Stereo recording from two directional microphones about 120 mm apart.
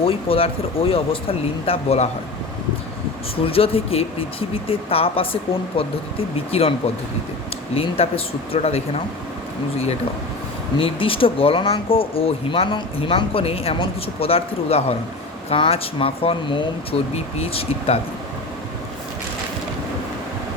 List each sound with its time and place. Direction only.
0.0 s speech: 50° left (ahead or behind)
3.4 s speech: 50° left (ahead or behind)
10.8 s speech: 50° left (ahead or behind)
17.2 s speech: 55° left (ahead or behind)